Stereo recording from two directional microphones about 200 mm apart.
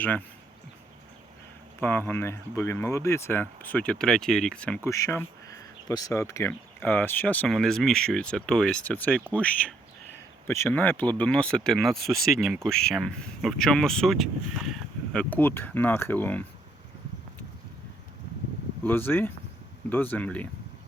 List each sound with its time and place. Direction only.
1.8 s speech: 10° left (ahead or behind)
18.8 s speech: 10° left (ahead or behind)